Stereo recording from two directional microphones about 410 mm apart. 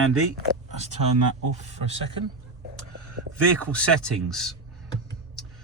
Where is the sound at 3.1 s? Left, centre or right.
Right.